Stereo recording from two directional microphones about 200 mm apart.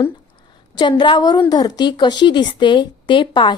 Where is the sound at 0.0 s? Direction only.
25° left (ahead or behind).